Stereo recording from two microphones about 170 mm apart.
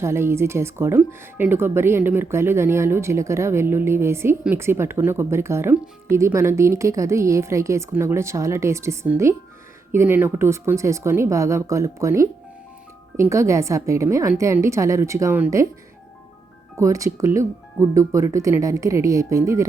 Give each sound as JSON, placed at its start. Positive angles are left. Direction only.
{"t": 0.0, "sound": "speech", "side_deg": -15}
{"t": 13.3, "sound": "speech", "side_deg": -15}
{"t": 16.7, "sound": "speech", "side_deg": -20}